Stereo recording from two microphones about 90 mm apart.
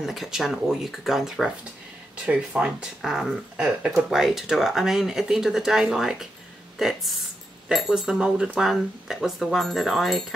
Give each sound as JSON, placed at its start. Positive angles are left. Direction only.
{"t": 0.0, "sound": "speech", "side_deg": 0}